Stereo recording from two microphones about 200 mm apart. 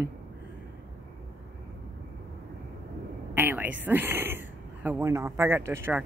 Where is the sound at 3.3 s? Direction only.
10° right (ahead or behind).